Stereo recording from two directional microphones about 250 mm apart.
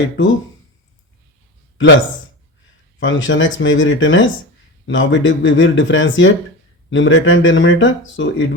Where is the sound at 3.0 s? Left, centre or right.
Left.